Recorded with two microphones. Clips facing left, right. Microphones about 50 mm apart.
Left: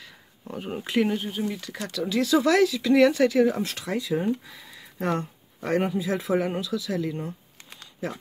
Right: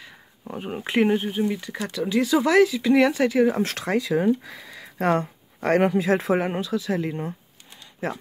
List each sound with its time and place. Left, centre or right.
0.0 s a sound: centre
0.8 s speech: right
3.6 s speech: right
5.1 s speech: right
6.3 s speech: right